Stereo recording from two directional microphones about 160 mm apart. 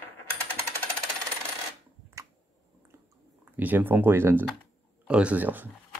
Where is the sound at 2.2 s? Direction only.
20° right (ahead or behind).